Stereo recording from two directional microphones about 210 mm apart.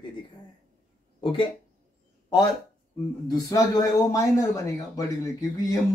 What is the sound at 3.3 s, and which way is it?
Speech, 15° left (ahead or behind).